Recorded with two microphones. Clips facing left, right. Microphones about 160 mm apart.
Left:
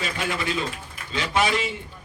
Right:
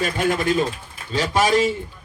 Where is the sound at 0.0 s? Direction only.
50° right (ahead or behind).